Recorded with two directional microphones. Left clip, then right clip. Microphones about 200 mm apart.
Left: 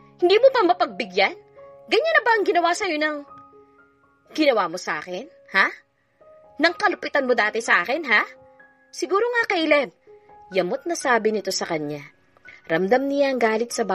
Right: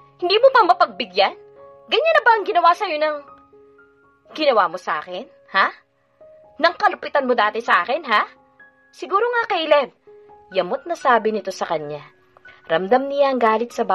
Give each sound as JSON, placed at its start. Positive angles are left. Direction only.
{"t": 0.2, "sound": "a woman's voice", "side_deg": 40}